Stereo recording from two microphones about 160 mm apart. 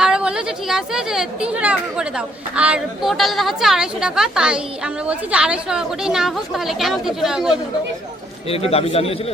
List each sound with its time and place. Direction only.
0.0 s speech: 5° right (ahead or behind)
8.4 s speech: 35° left (ahead or behind)